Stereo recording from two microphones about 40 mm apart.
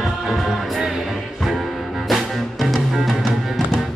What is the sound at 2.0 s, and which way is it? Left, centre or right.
Music, centre.